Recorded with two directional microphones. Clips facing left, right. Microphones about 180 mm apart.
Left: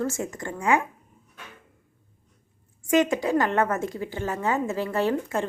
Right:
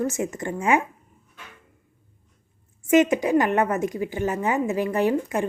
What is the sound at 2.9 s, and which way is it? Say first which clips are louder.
A woman's voice: right 3 dB; 20° right (ahead or behind).